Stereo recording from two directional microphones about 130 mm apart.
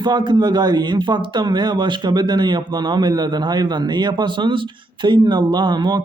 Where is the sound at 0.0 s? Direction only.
35° right (ahead or behind).